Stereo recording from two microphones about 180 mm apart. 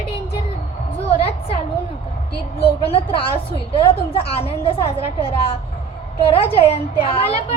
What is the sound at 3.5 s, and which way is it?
A woman's voice, 30° left (ahead or behind).